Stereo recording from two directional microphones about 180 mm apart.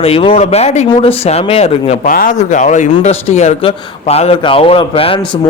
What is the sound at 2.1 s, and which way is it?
A man's voice, 50° left (ahead or behind).